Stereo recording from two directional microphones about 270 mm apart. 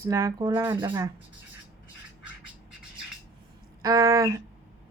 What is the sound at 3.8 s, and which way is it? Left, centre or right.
Speech, centre.